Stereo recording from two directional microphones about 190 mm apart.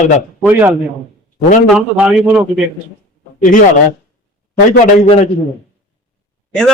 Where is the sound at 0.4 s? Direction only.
10° right (ahead or behind).